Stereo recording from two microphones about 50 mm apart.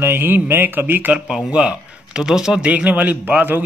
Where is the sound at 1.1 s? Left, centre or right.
Right.